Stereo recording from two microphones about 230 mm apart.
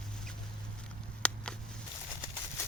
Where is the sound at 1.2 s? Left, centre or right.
Centre.